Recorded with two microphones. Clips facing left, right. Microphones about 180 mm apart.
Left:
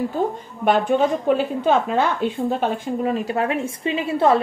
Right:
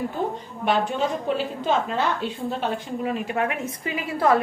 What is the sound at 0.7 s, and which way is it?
A woman's voice, 50° left (ahead or behind).